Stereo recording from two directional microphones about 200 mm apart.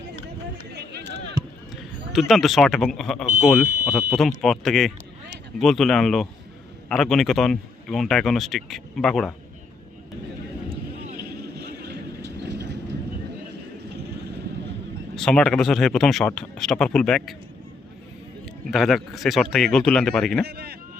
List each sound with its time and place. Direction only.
0.7 s a sound: 55° right (ahead or behind)
1.7 s speech: centre (ahead or behind)
11.6 s vehicle: 55° right (ahead or behind)
15.1 s speech: 5° left (ahead or behind)
18.7 s speech: centre (ahead or behind)
20.4 s a man's voice: 50° right (ahead or behind)